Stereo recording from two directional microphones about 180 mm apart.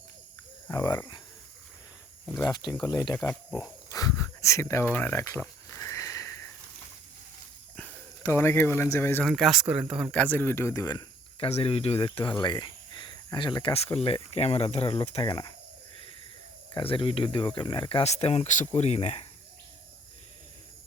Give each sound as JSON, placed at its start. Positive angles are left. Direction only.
{"t": 0.7, "sound": "speech", "side_deg": 20}
{"t": 2.4, "sound": "speech", "side_deg": 20}
{"t": 3.2, "sound": "a sound", "side_deg": 20}
{"t": 7.8, "sound": "speech", "side_deg": 10}
{"t": 9.2, "sound": "speech", "side_deg": 0}
{"t": 10.1, "sound": "speech", "side_deg": 10}
{"t": 11.4, "sound": "speech", "side_deg": 35}
{"t": 16.7, "sound": "speech", "side_deg": 30}